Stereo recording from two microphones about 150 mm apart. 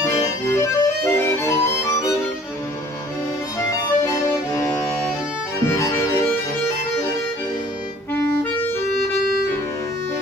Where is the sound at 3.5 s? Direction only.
20° left (ahead or behind).